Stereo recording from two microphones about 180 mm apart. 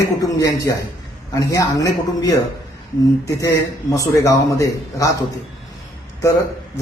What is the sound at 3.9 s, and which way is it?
Speech, 20° left (ahead or behind).